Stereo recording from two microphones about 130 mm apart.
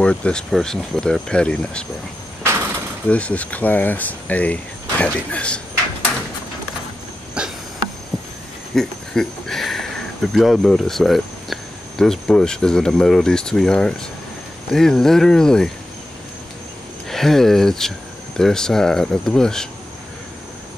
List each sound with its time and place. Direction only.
0.0 s speech: 10° left (ahead or behind)
2.4 s a sound: 20° right (ahead or behind)
3.1 s speech: 10° left (ahead or behind)
7.4 s insect: 10° right (ahead or behind)
8.7 s speech: 5° left (ahead or behind)
17.1 s speech: centre (ahead or behind)